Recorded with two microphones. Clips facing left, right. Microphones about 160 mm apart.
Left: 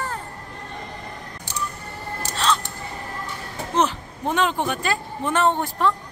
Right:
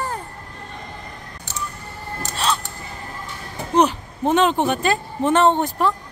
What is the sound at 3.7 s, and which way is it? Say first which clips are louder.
A man's voice: right 5 dB; 20° right (ahead or behind).